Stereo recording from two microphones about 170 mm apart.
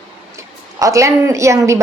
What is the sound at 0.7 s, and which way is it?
A woman's voice, 20° right (ahead or behind).